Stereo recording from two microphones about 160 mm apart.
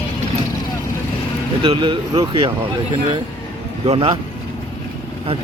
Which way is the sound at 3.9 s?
35° right (ahead or behind).